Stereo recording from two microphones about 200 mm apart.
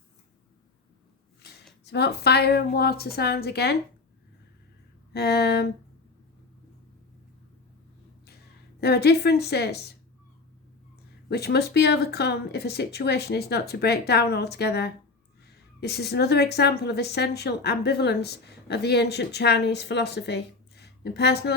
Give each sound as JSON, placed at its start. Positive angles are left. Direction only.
{"t": 1.4, "sound": "a sound", "side_deg": 55}
{"t": 1.8, "sound": "speech", "side_deg": 55}
{"t": 5.1, "sound": "speech", "side_deg": 50}
{"t": 8.8, "sound": "speech", "side_deg": 55}
{"t": 11.3, "sound": "a woman's voice", "side_deg": 55}